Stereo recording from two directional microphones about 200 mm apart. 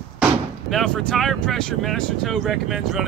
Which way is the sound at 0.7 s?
5° left (ahead or behind).